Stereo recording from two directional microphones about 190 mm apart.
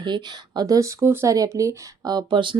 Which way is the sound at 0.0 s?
25° right (ahead or behind).